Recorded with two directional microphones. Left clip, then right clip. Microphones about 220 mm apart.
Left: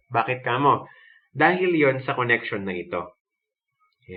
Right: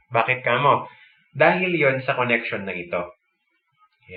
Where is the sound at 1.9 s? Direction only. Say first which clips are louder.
Right 1 dB; 60° left (ahead or behind).